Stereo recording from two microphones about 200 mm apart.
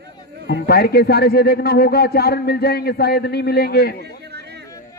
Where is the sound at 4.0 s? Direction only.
55° right (ahead or behind).